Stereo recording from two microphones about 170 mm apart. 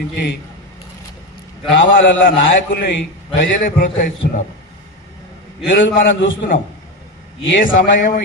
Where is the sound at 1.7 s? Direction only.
90° left.